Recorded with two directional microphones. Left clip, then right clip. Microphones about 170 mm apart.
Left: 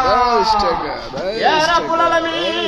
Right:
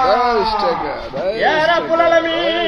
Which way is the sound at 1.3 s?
25° right (ahead or behind).